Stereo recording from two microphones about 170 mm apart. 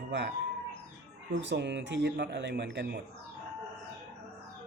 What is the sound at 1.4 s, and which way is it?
Speech, 90° right.